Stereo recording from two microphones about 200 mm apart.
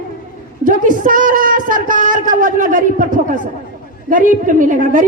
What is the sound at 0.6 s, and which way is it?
A woman's voice, 40° right (ahead or behind).